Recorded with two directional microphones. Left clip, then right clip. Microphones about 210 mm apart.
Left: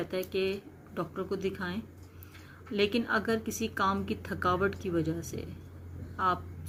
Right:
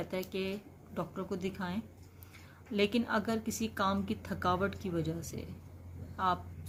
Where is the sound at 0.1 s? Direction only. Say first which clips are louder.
Left 6 dB; 55° right (ahead or behind).